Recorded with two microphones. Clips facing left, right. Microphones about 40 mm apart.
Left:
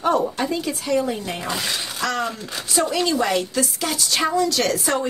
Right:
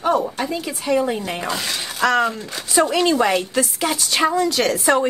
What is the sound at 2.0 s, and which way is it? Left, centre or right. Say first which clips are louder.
Speech: right 8 dB; right.